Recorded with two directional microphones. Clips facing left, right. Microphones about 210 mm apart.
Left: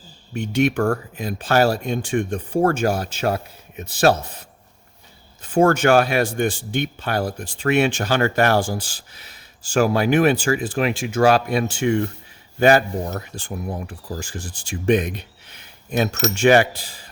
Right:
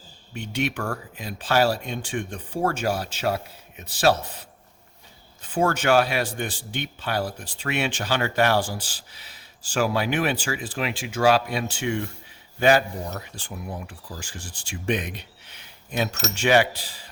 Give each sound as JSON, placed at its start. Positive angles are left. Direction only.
{"t": 0.3, "sound": "speech", "side_deg": 45}
{"t": 5.4, "sound": "speech", "side_deg": 45}